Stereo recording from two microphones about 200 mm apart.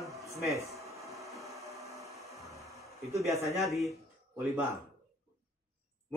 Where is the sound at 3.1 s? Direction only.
15° right (ahead or behind).